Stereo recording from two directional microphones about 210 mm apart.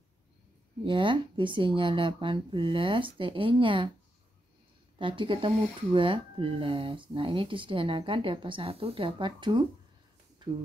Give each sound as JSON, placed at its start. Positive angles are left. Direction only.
{"t": 0.8, "sound": "speech", "side_deg": -25}
{"t": 4.9, "sound": "speech", "side_deg": -25}